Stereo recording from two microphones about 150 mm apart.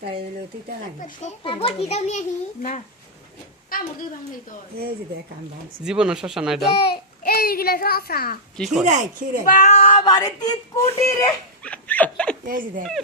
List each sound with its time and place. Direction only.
1.5 s a child's voice: 40° left (ahead or behind)
5.8 s speech: 5° right (ahead or behind)
6.7 s a child's voice: 90° left
8.5 s speech: centre (ahead or behind)
8.8 s speech: 55° right (ahead or behind)
9.5 s speech: 50° left (ahead or behind); by 11.3 s 20° left (ahead or behind)
11.6 s a sound: 10° left (ahead or behind)
12.5 s speech: 70° right (ahead or behind)